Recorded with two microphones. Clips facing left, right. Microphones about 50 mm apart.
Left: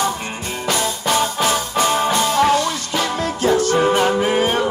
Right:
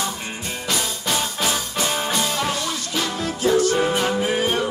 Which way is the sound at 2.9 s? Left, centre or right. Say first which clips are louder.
Left 4 dB; left.